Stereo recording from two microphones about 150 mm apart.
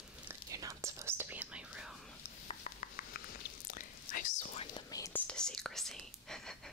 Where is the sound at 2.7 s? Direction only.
55° left (ahead or behind).